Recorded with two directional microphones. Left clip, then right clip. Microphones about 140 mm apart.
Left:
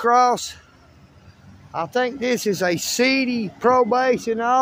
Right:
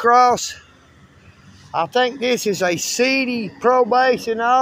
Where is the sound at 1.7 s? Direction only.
20° left (ahead or behind).